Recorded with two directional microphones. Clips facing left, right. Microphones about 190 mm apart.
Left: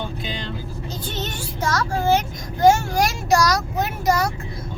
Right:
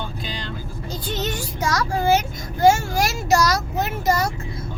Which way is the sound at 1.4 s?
15° right (ahead or behind).